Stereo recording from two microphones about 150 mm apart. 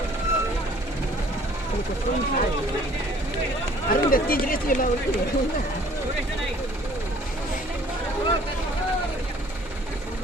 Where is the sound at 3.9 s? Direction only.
75° left (ahead or behind).